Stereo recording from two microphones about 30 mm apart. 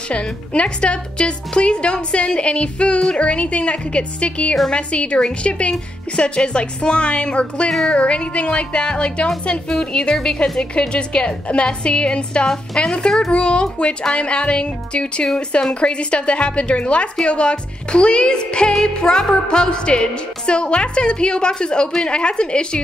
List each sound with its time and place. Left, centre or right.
0.1 s speech: left
12.4 s a woman's voice: left